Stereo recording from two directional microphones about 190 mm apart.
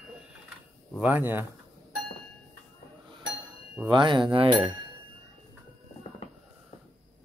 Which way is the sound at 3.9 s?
25° right (ahead or behind).